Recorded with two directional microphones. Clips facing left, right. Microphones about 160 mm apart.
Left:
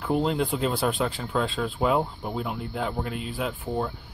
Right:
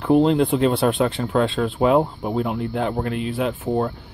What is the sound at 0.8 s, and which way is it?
Speech, 50° right (ahead or behind).